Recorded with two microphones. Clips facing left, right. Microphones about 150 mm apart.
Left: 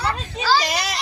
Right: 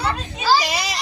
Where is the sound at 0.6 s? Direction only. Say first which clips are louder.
Even; centre (ahead or behind).